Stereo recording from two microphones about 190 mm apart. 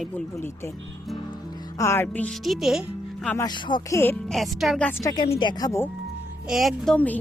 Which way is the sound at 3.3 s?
20° left (ahead or behind).